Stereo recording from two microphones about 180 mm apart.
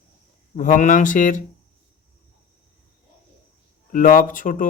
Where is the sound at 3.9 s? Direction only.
50° left (ahead or behind).